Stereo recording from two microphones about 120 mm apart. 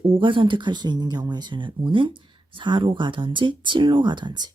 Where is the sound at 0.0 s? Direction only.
45° right (ahead or behind).